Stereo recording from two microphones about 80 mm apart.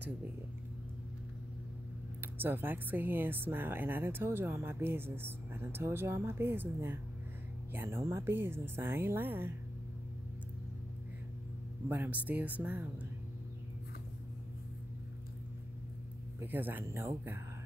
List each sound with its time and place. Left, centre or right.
2.3 s speech: right
11.9 s speech: right
16.3 s speech: right